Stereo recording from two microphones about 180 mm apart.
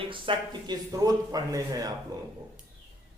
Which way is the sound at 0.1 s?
25° right (ahead or behind).